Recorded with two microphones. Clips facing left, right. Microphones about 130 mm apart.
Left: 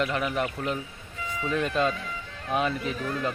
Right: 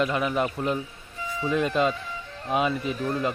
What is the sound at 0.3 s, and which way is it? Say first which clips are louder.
Speech: right 3 dB; 30° right (ahead or behind).